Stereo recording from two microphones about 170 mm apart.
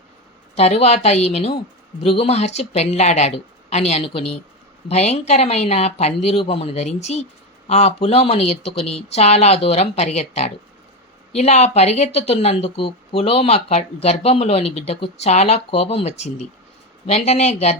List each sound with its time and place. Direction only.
0.5 s speech: 40° left (ahead or behind)